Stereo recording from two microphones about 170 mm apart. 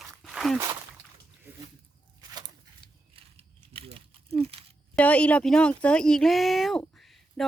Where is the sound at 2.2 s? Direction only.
25° right (ahead or behind).